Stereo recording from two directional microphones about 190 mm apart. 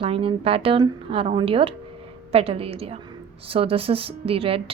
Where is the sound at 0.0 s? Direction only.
30° right (ahead or behind).